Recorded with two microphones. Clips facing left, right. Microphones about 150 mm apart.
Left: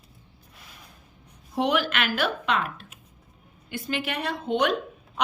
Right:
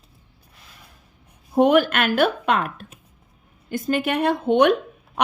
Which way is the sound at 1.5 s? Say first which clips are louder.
Right 8 dB; 50° right (ahead or behind).